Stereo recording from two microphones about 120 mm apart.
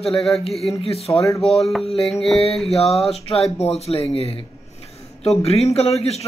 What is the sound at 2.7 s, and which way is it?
A man's voice, 60° left (ahead or behind).